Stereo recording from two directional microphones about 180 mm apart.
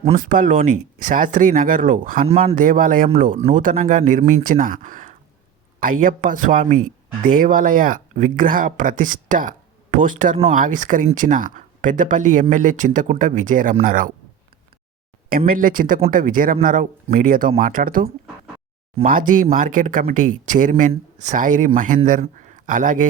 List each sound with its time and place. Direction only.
0.2 s speech: 50° right (ahead or behind)
15.4 s speech: 50° right (ahead or behind)
19.0 s a man's voice: 50° right (ahead or behind)